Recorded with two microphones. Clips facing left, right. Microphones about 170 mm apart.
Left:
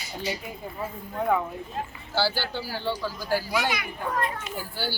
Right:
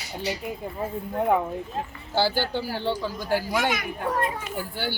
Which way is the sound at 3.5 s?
50° right (ahead or behind).